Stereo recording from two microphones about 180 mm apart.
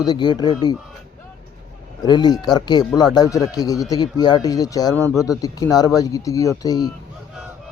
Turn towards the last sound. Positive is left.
turn(degrees=20)  # may be behind; listen again after turning